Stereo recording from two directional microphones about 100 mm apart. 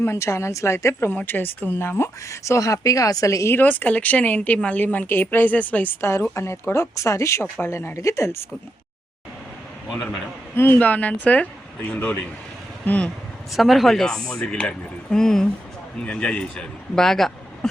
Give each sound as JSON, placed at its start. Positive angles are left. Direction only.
{"t": 0.0, "sound": "speech", "side_deg": 30}
{"t": 3.6, "sound": "a woman's voice", "side_deg": 15}
{"t": 10.5, "sound": "a woman's voice", "side_deg": 20}
{"t": 13.6, "sound": "a woman's voice", "side_deg": 0}